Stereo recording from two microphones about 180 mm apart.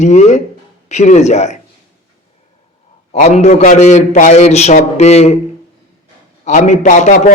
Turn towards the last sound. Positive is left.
turn(degrees=45)  # may be behind; listen again after turning